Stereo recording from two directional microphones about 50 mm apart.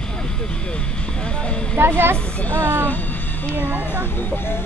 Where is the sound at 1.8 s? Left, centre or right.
Right.